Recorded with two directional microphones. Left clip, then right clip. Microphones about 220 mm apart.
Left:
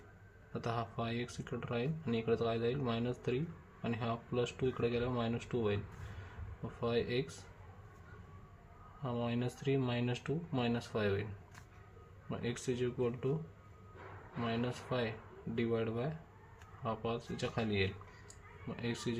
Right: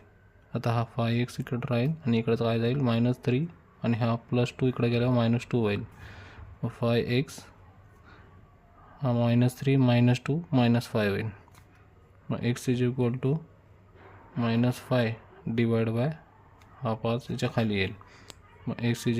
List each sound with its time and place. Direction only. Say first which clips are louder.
0.5 s speech: right 8 dB; 50° right (ahead or behind)
9.0 s speech: right 11 dB; 55° right (ahead or behind)
12.3 s speech: right 8 dB; 50° right (ahead or behind)
14.4 s speech: right 9 dB; 55° right (ahead or behind)